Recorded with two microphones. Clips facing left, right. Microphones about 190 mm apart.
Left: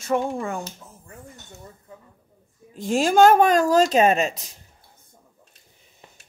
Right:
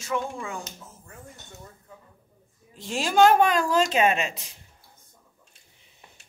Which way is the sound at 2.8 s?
45° left (ahead or behind).